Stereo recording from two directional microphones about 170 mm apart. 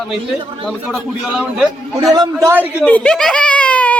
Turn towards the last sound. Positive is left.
turn(degrees=10)  # may be behind; listen again after turning